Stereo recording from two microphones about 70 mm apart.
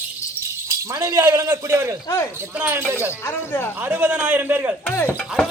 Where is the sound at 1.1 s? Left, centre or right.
Right.